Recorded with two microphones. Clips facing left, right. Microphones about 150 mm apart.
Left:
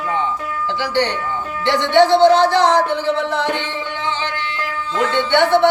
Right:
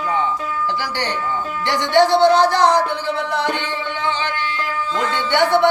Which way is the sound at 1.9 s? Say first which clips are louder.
Left 2 dB; 20° left (ahead or behind).